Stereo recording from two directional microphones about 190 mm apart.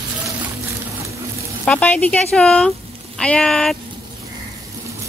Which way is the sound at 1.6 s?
5° left (ahead or behind).